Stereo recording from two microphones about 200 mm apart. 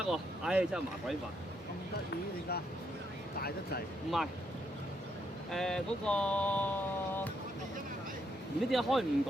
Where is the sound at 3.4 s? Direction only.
50° left (ahead or behind).